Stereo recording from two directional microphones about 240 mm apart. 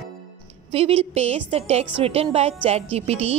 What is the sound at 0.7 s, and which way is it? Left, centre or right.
A woman's voice, right.